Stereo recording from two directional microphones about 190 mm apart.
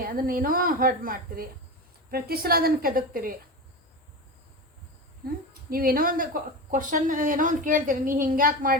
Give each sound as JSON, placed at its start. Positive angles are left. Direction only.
{"t": 0.0, "sound": "a woman's voice", "side_deg": -50}
{"t": 5.7, "sound": "a woman's voice", "side_deg": -50}